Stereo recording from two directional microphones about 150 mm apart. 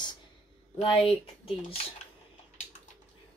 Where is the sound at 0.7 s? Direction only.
35° left (ahead or behind).